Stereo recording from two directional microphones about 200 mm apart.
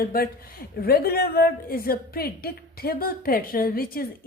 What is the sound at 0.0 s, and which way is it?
A woman's voice, 50° left (ahead or behind).